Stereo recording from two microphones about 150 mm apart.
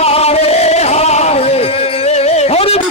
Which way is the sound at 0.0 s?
45° left (ahead or behind).